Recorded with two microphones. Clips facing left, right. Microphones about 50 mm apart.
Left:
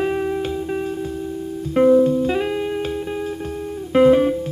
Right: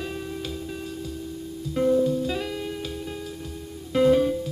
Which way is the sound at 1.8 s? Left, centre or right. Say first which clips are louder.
Left 8 dB; left.